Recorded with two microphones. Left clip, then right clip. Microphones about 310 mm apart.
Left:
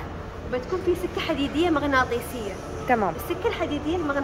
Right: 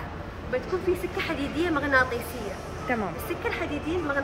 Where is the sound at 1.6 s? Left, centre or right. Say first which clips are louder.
Left 1 dB; left.